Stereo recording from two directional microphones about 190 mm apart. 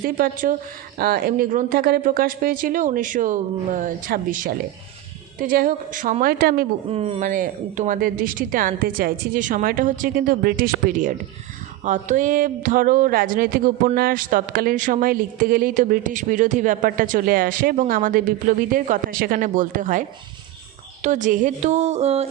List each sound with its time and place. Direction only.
0.0 s speech: 45° right (ahead or behind)
6.9 s speech: 30° right (ahead or behind)